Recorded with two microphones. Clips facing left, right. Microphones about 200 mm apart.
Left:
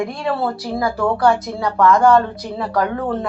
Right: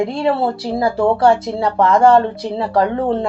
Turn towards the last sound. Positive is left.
turn(degrees=-25)  # may be behind; listen again after turning